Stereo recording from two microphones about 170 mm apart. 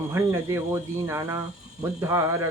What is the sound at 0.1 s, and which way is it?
Speech, 15° right (ahead or behind).